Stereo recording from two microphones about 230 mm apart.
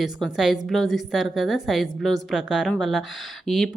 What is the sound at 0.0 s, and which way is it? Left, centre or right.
Speech, centre.